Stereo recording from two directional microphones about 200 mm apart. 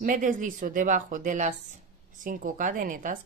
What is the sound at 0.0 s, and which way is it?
A woman's voice, 45° right (ahead or behind).